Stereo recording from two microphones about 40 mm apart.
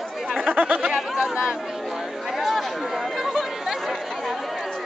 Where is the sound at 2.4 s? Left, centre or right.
Centre.